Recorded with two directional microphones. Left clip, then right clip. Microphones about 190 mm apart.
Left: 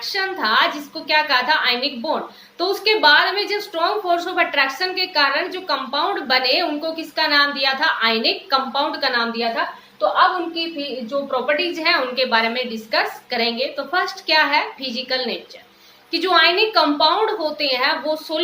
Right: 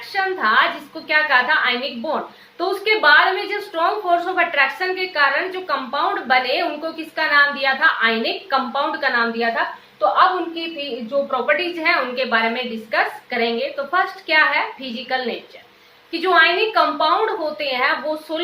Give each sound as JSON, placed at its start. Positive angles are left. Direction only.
{"t": 0.1, "sound": "a woman's voice", "side_deg": 25}
{"t": 11.3, "sound": "a woman's voice", "side_deg": 25}